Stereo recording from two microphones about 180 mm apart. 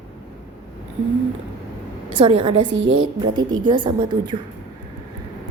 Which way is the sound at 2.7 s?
90° right.